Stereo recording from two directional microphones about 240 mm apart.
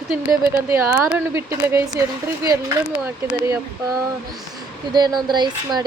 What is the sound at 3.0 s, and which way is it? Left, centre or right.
Speech, centre.